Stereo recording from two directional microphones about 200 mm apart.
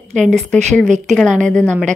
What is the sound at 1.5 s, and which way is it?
Speech, 5° left (ahead or behind).